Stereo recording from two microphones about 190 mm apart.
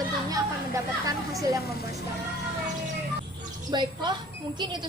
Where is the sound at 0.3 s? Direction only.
20° right (ahead or behind).